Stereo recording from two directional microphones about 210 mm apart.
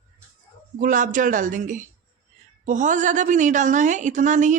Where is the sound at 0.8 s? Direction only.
40° right (ahead or behind).